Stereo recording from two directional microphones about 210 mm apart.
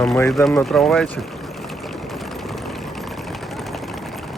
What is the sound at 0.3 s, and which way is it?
Speech, centre (ahead or behind).